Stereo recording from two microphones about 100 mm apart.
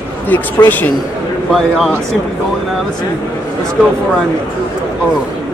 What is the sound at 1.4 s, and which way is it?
Speech, centre (ahead or behind).